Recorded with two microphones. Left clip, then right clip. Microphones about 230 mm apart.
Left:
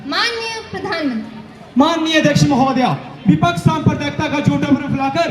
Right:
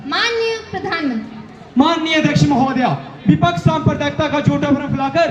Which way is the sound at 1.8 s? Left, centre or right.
Centre.